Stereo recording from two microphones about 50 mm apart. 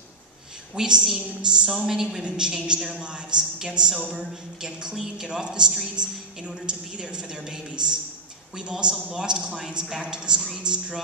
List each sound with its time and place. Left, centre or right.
0.7 s a man's voice: centre
1.9 s a woman's voice: centre
2.2 s a man's voice: centre
9.8 s a man's voice: centre
10.1 s a man's voice: centre